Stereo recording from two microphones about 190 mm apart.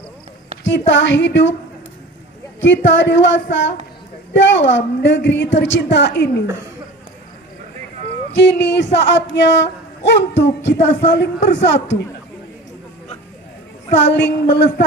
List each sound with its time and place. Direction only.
0.7 s speech: 75° left (ahead or behind)
2.6 s speech: 75° left (ahead or behind)
8.4 s speech: 65° left (ahead or behind)
13.9 s a sound: 65° left (ahead or behind)